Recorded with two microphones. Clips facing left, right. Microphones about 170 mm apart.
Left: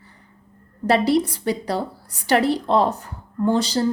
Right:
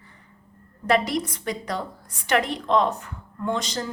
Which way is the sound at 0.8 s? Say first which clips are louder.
Left 5 dB; 30° left (ahead or behind).